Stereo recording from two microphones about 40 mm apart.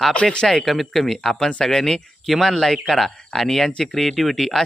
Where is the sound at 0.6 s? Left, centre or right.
Centre.